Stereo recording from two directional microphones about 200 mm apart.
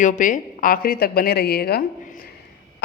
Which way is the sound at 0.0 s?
40° left (ahead or behind).